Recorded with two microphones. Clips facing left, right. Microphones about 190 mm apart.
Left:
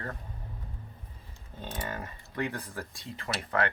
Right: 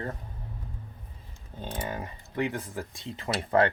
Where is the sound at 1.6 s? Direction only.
20° right (ahead or behind).